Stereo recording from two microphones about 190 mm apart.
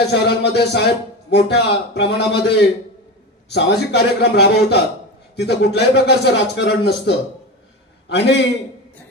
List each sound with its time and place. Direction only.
0.0 s a man's voice: 60° left (ahead or behind)